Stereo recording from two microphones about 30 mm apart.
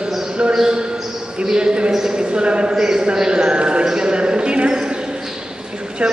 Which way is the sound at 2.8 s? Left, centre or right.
Centre.